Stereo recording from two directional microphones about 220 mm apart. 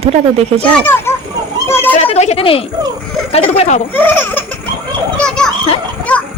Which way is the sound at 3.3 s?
30° left (ahead or behind).